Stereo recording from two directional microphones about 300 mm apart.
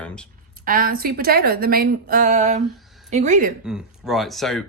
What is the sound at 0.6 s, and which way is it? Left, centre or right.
A woman's voice, right.